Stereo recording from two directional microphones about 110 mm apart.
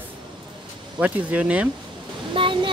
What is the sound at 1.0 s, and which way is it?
Speech, 10° right (ahead or behind).